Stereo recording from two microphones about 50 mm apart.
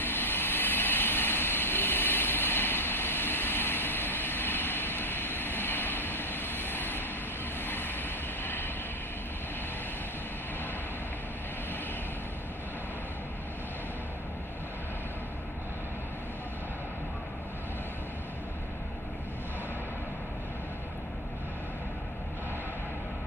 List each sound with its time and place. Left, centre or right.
0.0 s vehicle: left